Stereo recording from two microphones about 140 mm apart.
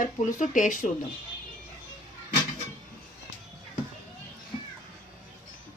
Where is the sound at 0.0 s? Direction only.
65° left (ahead or behind).